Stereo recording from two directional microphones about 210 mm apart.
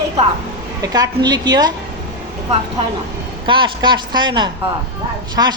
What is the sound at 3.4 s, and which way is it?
A woman's voice, 25° right (ahead or behind).